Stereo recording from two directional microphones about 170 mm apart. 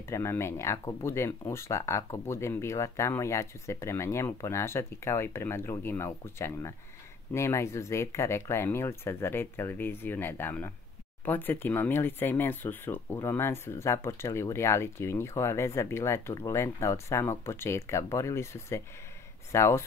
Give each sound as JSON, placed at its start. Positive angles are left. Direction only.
{"t": 0.0, "sound": "speech", "side_deg": 15}